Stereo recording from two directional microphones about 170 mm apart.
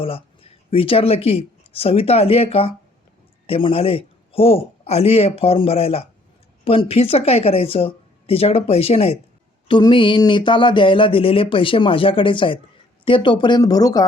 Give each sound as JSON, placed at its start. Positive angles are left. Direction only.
{"t": 0.0, "sound": "a man's voice", "side_deg": 35}